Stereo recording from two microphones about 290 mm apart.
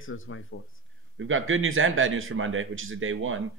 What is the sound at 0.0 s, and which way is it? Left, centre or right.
Speech, left.